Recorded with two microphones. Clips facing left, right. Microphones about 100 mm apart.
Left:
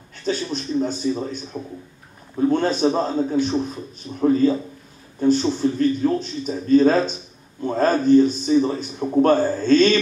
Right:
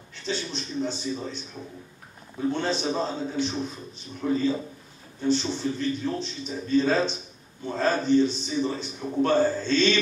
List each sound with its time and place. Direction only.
0.1 s a man's voice: 45° left (ahead or behind)
2.5 s a man's voice: 45° left (ahead or behind)